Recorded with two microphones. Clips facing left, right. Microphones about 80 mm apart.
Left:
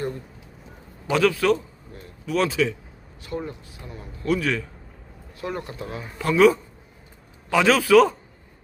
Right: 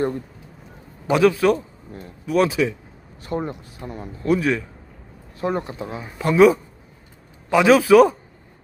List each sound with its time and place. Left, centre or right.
1.1 s speech: centre
3.2 s a man's voice: right
4.2 s speech: right